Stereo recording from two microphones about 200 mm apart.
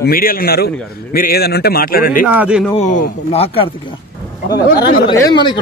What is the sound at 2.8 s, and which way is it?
Speech, 40° left (ahead or behind).